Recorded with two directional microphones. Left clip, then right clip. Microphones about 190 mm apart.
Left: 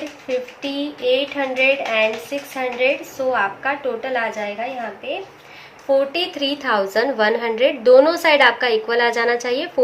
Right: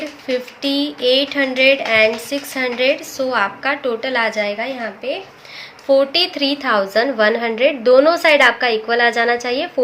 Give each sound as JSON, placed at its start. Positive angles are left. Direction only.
{"t": 0.3, "sound": "a woman's voice", "side_deg": -55}
{"t": 5.9, "sound": "speech", "side_deg": -40}
{"t": 6.3, "sound": "a woman's voice", "side_deg": -25}